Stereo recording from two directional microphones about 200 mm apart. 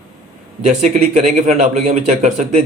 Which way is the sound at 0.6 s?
35° right (ahead or behind).